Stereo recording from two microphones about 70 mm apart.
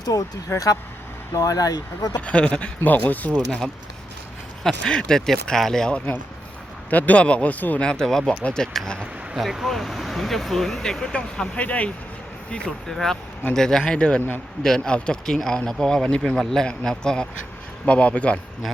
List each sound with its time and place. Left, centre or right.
0.0 s speech: left
2.1 s speech: centre
6.9 s speech: left
7.9 s speech: centre
9.4 s speech: centre